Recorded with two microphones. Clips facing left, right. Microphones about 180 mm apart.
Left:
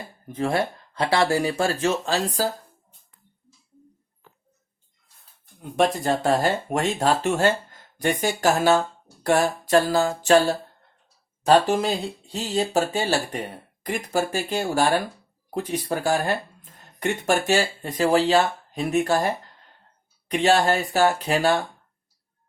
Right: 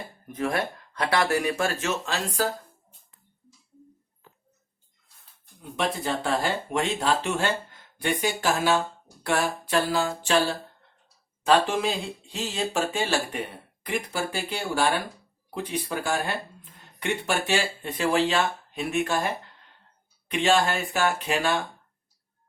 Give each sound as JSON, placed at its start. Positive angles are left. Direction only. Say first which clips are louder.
{"t": 0.3, "sound": "speech", "louder": "left 4 dB", "side_deg": 30}
{"t": 5.7, "sound": "speech", "louder": "left 6 dB", "side_deg": 45}
{"t": 11.4, "sound": "speech", "louder": "left 4 dB", "side_deg": 40}